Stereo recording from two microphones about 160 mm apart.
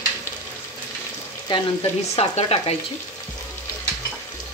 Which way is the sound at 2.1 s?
40° left (ahead or behind).